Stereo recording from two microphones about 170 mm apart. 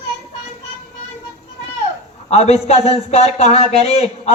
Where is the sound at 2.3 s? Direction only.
40° left (ahead or behind).